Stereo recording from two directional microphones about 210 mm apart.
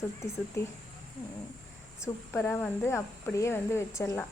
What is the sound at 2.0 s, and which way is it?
Speech, 10° left (ahead or behind).